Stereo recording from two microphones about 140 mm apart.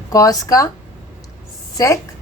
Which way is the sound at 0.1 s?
25° left (ahead or behind).